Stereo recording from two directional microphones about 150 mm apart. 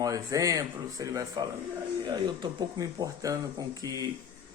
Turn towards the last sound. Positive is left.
turn(degrees=-25)  # may be behind; listen again after turning